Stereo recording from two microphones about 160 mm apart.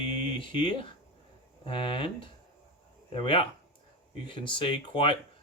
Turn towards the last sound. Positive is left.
turn(degrees=35)  # may be behind; listen again after turning